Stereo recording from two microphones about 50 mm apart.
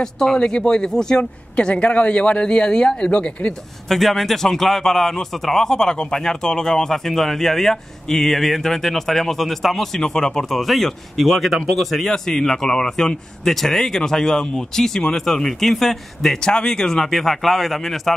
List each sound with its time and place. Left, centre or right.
0.0 s speech: centre
3.9 s a man's voice: centre